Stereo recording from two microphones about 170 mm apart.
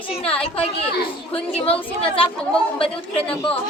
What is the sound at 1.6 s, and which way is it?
Speech, 35° left (ahead or behind).